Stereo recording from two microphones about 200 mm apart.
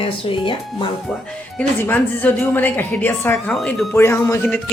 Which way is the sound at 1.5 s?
10° left (ahead or behind).